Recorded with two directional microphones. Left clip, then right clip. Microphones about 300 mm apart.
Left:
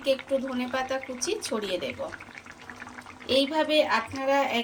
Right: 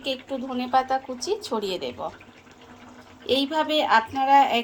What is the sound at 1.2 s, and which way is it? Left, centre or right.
Speech, right.